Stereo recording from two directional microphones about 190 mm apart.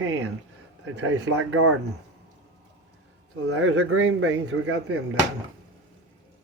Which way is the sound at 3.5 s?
90° right.